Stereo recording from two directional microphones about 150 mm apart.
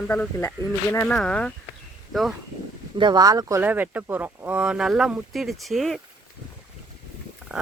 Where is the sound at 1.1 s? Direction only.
5° left (ahead or behind).